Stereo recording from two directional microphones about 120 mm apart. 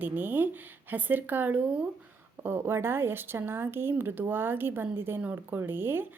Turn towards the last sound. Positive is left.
turn(degrees=-15)  # may be behind; listen again after turning